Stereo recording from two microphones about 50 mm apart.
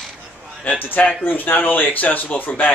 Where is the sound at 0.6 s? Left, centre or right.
Left.